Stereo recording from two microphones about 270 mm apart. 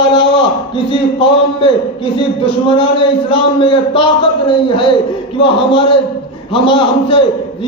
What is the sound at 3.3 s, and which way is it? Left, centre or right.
Speech, centre.